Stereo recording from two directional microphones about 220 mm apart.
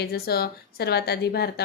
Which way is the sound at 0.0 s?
45° left (ahead or behind).